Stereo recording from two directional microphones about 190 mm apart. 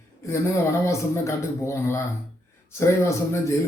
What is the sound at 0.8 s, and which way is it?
A man's voice, 15° left (ahead or behind).